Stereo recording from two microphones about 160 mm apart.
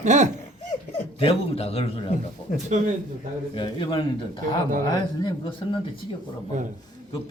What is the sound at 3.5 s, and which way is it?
A man's voice, 30° left (ahead or behind).